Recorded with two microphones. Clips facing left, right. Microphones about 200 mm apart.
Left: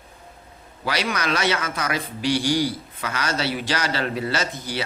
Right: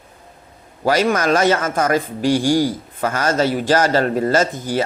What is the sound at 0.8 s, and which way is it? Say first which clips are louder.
Speech: right 9 dB; 45° right (ahead or behind).